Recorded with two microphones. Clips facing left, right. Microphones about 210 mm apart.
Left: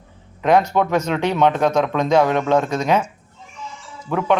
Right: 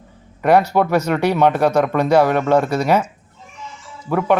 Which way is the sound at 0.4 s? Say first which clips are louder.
Right 2 dB; 10° right (ahead or behind).